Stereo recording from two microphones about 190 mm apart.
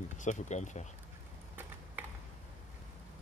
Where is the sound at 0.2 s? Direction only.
40° left (ahead or behind).